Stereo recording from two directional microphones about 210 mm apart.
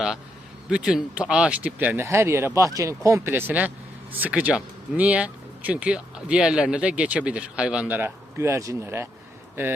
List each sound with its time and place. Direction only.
0.7 s speech: 5° right (ahead or behind)